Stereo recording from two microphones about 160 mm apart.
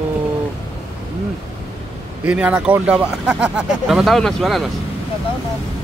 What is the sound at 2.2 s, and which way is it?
Speech, 10° right (ahead or behind).